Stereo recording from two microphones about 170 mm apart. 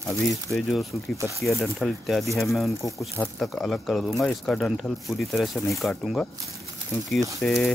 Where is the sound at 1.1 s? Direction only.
15° right (ahead or behind).